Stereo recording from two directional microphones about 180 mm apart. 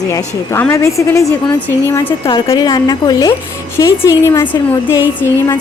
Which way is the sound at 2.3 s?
25° left (ahead or behind).